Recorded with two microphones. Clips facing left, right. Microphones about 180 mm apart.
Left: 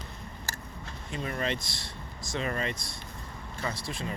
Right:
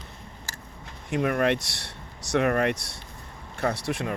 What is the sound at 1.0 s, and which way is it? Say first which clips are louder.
Speech: right 9 dB; 65° right (ahead or behind).